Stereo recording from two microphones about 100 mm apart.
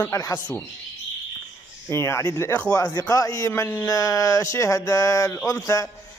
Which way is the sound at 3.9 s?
35° left (ahead or behind).